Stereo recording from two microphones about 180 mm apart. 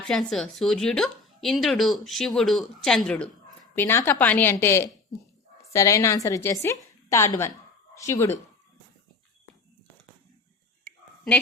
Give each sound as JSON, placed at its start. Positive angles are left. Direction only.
{"t": 0.1, "sound": "a woman's voice", "side_deg": 0}